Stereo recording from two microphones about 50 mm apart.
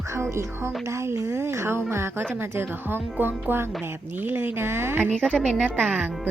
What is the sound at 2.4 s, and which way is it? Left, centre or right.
Speech, right.